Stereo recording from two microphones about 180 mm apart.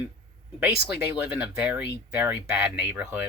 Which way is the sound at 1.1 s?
10° right (ahead or behind).